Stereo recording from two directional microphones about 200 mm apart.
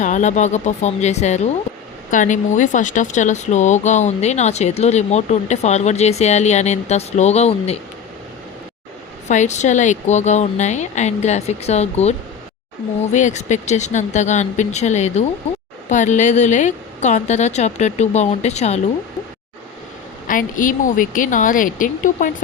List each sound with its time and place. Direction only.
0.0 s speech: 40° left (ahead or behind)
9.3 s speech: 35° left (ahead or behind)
13.1 s speech: 35° left (ahead or behind)
20.2 s speech: 40° left (ahead or behind)